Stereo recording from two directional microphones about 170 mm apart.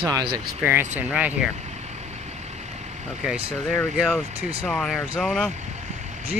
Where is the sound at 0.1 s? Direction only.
25° right (ahead or behind).